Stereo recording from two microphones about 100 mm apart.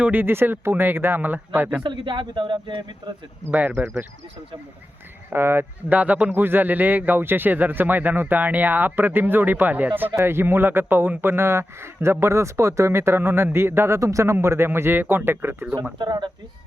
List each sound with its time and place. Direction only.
0.0 s speech: 20° right (ahead or behind)
1.8 s speech: 55° right (ahead or behind)
3.5 s speech: 20° right (ahead or behind)
5.3 s speech: 25° right (ahead or behind)
16.0 s speech: 45° right (ahead or behind)